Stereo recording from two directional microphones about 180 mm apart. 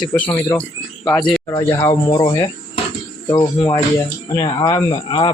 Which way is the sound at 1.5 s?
20° left (ahead or behind).